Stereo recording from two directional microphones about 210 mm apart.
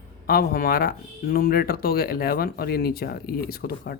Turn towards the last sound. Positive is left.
turn(degrees=45)  # may be behind; listen again after turning